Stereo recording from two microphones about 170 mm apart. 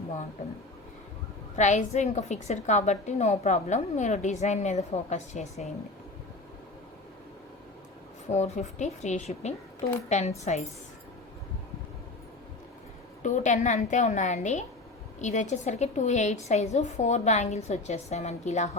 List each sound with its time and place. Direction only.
1.5 s a woman's voice: 45° left (ahead or behind)
8.3 s a woman's voice: 40° left (ahead or behind)
13.2 s a woman's voice: 45° left (ahead or behind)